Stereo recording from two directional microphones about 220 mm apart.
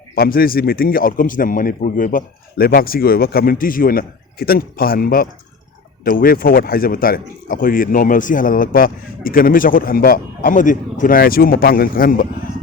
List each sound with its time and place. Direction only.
0.2 s speech: 40° left (ahead or behind)